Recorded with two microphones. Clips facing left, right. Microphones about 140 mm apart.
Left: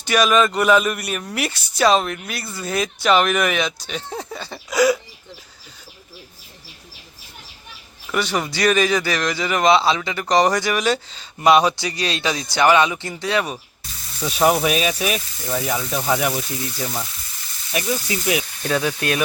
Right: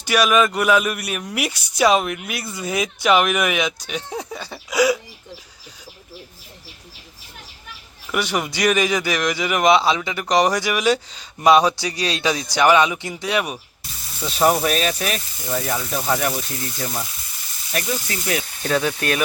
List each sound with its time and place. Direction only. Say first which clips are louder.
0.0 s a man's voice: even; 10° right (ahead or behind)
8.1 s a man's voice: even; 15° right (ahead or behind)
14.3 s speech: left 1 dB; 5° left (ahead or behind); by 19.2 s 20° left (ahead or behind)